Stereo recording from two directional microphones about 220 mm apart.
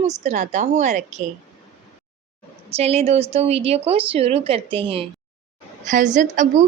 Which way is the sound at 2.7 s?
30° right (ahead or behind).